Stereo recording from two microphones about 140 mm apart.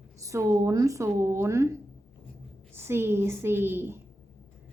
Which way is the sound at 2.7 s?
15° right (ahead or behind).